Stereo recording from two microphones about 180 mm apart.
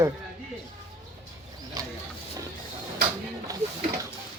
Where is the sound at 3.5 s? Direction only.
20° right (ahead or behind).